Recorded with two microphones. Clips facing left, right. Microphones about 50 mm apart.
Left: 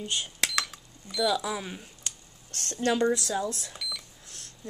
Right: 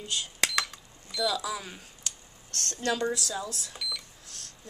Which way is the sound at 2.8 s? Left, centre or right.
Left.